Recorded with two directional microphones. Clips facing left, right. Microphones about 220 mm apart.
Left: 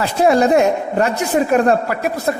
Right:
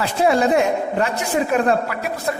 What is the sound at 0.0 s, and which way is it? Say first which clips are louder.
A woman's voice: left 3 dB; 45° left (ahead or behind).